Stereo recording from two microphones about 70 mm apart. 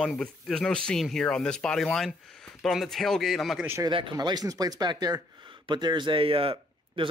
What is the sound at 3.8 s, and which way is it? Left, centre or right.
Speech, right.